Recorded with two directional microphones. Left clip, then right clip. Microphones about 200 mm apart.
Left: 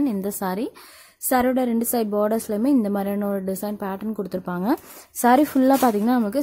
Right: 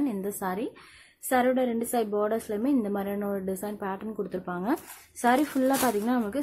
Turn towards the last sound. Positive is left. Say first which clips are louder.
# left 6 dB
turn(degrees=50)  # may be behind; listen again after turning